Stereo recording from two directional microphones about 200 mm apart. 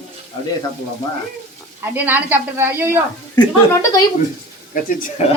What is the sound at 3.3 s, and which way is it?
Speech, 15° left (ahead or behind).